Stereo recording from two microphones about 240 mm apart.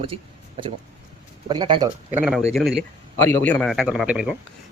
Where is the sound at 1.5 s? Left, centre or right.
Centre.